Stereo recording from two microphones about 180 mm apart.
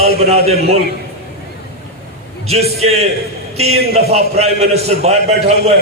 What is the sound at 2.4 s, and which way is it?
A man's voice, 35° right (ahead or behind).